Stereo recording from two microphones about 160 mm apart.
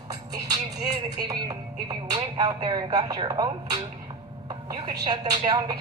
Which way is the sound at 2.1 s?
25° right (ahead or behind).